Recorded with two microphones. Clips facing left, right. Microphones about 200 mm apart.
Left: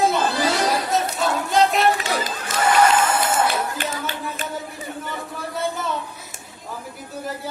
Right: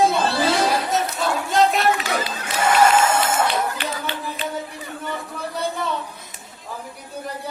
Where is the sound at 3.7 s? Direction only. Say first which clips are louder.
Even; 45° left (ahead or behind).